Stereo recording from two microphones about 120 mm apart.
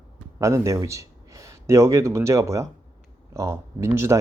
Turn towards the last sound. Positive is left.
turn(degrees=-20)  # may be behind; listen again after turning